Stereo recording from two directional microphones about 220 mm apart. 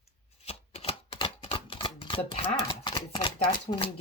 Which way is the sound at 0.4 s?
25° left (ahead or behind).